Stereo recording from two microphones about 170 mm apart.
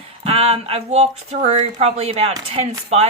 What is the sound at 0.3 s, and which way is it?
Speech, 35° right (ahead or behind).